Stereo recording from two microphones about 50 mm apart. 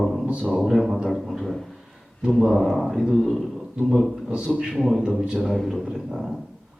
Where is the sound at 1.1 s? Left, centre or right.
Centre.